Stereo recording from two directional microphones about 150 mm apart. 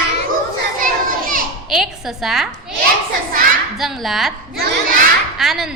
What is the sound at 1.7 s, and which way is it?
Speech, centre (ahead or behind).